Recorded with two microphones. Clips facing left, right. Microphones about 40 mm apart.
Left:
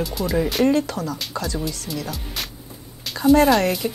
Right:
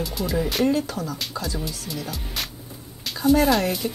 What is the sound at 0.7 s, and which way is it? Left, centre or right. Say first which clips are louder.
Speech: left 3 dB; left.